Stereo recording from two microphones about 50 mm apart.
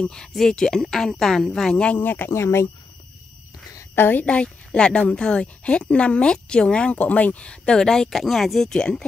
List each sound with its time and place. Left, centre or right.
0.3 s speech: centre
2.0 s speech: left
2.3 s speech: left
3.9 s speech: left
4.2 s speech: left
8.2 s speech: centre